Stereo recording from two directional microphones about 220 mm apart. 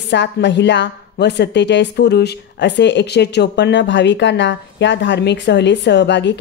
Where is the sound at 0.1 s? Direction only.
50° left (ahead or behind).